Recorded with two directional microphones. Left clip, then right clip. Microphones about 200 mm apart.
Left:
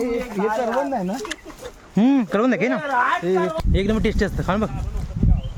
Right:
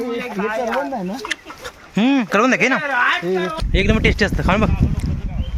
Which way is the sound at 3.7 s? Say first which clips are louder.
Right 5 dB; 10° left (ahead or behind).